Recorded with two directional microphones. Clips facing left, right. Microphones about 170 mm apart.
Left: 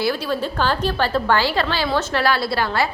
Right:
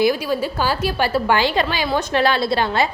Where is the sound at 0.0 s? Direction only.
10° right (ahead or behind).